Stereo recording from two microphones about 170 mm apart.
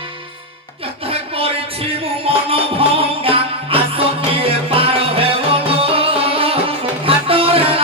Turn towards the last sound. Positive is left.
turn(degrees=-35)  # may be behind; listen again after turning